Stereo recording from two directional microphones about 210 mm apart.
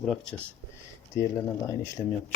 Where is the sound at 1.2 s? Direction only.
15° left (ahead or behind).